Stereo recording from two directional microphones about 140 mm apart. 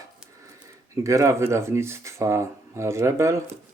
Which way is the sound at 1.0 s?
20° right (ahead or behind).